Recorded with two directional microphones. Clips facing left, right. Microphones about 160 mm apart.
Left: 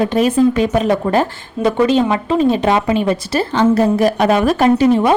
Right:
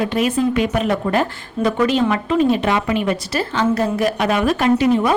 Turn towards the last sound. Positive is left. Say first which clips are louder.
# left 3 dB
turn(degrees=35)  # may be behind; listen again after turning